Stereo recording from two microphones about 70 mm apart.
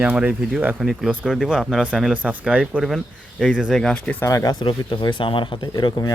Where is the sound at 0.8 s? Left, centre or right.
Centre.